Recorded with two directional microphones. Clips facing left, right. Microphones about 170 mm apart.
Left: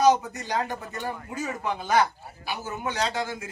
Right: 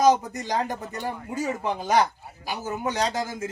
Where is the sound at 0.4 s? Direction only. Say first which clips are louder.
Right 2 dB; 40° right (ahead or behind).